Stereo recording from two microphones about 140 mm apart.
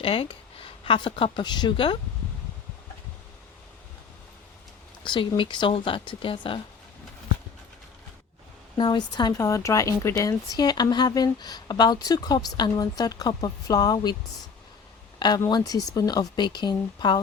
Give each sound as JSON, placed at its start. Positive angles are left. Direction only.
{"t": 0.0, "sound": "speech", "side_deg": 40}
{"t": 5.0, "sound": "speech", "side_deg": 35}
{"t": 8.8, "sound": "speech", "side_deg": 30}
{"t": 15.4, "sound": "speech", "side_deg": 30}